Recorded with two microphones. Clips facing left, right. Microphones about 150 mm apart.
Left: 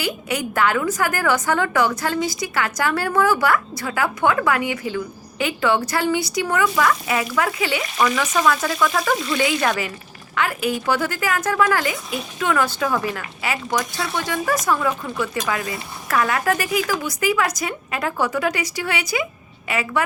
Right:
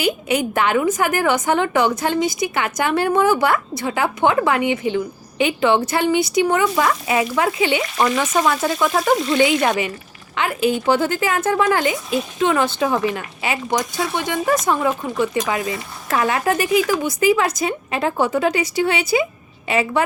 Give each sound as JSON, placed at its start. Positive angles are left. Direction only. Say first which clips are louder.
{"t": 0.0, "sound": "a woman's voice", "louder": "right 5 dB", "side_deg": -25}